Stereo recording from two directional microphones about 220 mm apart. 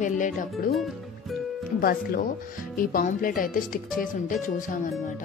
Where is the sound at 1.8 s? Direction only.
45° left (ahead or behind).